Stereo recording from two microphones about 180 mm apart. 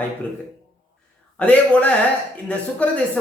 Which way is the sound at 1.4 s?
5° left (ahead or behind).